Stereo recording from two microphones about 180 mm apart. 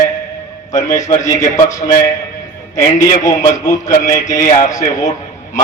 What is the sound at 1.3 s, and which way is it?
Speech, 15° left (ahead or behind).